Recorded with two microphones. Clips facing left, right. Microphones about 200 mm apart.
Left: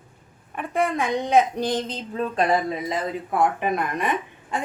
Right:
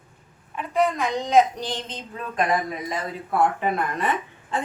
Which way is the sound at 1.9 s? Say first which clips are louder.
Left 7 dB; 30° left (ahead or behind).